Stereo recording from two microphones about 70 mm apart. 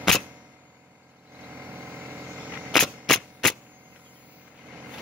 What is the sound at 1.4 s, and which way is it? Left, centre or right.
Vehicle, right.